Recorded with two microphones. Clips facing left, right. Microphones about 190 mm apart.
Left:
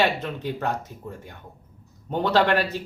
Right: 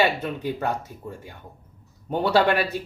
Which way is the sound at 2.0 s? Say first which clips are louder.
Right 1 dB; 10° right (ahead or behind).